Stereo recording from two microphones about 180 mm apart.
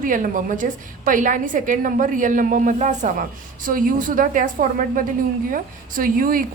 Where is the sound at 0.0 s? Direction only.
50° right (ahead or behind).